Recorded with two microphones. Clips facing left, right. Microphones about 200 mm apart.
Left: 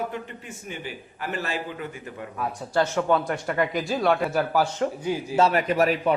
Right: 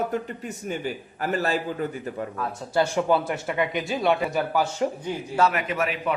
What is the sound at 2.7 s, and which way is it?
Speech, 10° right (ahead or behind).